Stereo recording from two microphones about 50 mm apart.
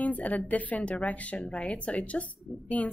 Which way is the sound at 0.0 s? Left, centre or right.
Left.